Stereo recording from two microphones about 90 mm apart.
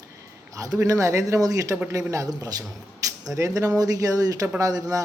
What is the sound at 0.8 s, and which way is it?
A man's voice, 35° right (ahead or behind).